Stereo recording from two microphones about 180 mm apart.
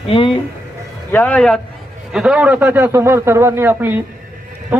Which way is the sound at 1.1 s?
10° left (ahead or behind).